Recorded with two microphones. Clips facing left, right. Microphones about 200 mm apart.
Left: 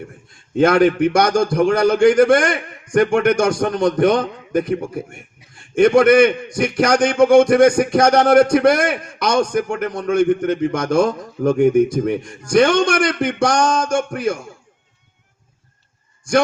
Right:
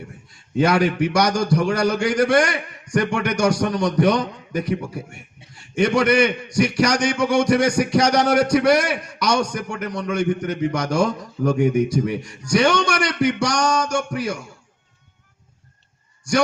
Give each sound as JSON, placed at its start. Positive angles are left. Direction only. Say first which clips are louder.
{"t": 0.3, "sound": "a man's voice", "louder": "left 4 dB", "side_deg": 50}